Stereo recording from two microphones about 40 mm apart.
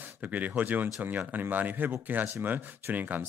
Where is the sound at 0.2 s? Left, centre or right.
Right.